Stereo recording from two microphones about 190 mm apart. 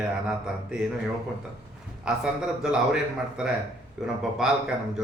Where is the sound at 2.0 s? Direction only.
5° right (ahead or behind).